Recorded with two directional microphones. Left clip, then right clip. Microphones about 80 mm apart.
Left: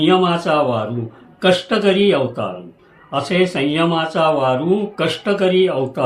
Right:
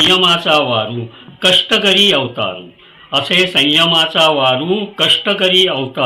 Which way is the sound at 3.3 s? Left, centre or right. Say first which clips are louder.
Right 6 dB; left.